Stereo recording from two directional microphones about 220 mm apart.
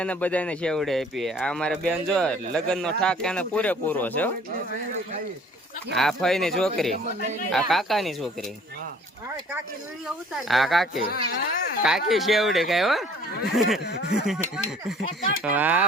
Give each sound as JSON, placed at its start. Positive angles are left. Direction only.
{"t": 0.0, "sound": "speech", "side_deg": 5}
{"t": 5.9, "sound": "speech", "side_deg": 0}
{"t": 10.5, "sound": "speech", "side_deg": 0}
{"t": 15.0, "sound": "speech", "side_deg": 40}
{"t": 15.4, "sound": "speech", "side_deg": -5}